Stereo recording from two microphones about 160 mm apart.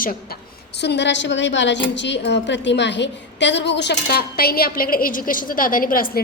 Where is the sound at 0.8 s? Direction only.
90° left.